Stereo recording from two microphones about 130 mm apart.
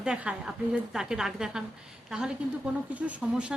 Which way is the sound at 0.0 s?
10° right (ahead or behind).